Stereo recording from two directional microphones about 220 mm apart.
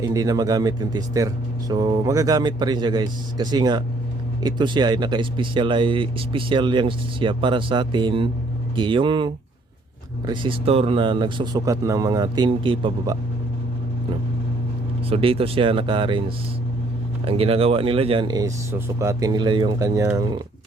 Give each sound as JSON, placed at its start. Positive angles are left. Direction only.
{"t": 0.0, "sound": "speech", "side_deg": -15}
{"t": 15.1, "sound": "speech", "side_deg": -25}
{"t": 17.2, "sound": "speech", "side_deg": -25}